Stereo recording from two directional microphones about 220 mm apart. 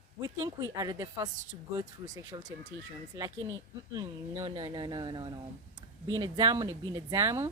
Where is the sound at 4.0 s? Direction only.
15° right (ahead or behind).